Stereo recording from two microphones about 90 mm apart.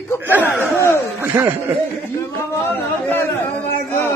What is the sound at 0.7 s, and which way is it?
Speech, 30° left (ahead or behind).